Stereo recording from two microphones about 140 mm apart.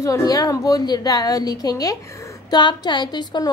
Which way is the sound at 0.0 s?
25° left (ahead or behind).